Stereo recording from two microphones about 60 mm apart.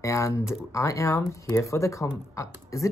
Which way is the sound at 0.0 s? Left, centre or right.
Left.